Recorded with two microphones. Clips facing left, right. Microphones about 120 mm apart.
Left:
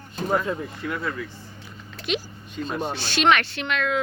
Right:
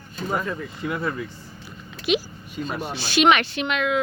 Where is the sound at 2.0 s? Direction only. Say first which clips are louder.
Right 5 dB; 10° right (ahead or behind).